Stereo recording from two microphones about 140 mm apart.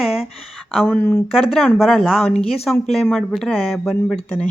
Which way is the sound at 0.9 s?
10° left (ahead or behind).